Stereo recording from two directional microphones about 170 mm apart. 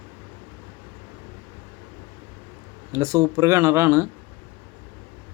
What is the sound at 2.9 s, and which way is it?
Speech, 15° right (ahead or behind).